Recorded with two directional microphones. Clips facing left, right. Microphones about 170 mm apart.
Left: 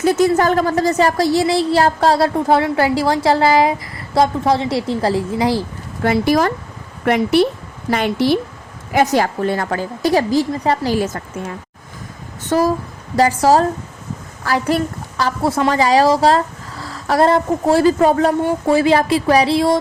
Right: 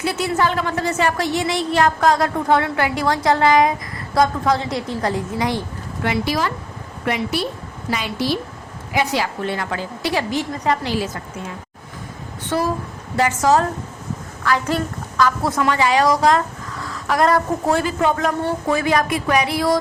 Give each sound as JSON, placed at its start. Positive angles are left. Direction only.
{"t": 0.0, "sound": "a woman's voice", "side_deg": 40}
{"t": 10.9, "sound": "a woman's voice", "side_deg": 45}
{"t": 12.5, "sound": "a woman's voice", "side_deg": 40}
{"t": 15.2, "sound": "a woman's voice", "side_deg": 30}